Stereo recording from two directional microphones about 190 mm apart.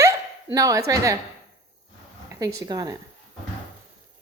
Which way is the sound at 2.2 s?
20° right (ahead or behind).